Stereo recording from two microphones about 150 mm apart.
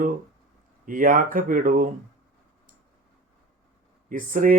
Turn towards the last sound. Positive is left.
turn(degrees=-65)  # may be behind; listen again after turning